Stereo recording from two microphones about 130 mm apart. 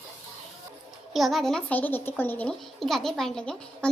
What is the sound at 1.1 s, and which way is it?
A woman's voice, centre (ahead or behind).